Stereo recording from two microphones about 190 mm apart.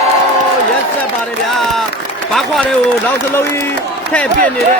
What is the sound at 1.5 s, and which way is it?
A man's voice, centre (ahead or behind).